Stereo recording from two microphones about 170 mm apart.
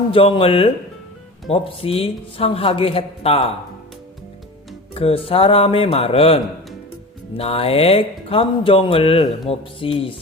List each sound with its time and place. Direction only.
0.1 s speech: 30° left (ahead or behind)
4.9 s speech: 35° left (ahead or behind)